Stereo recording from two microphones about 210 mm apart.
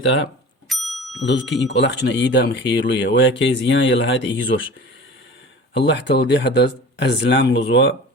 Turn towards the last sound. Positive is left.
turn(degrees=60)  # may be behind; listen again after turning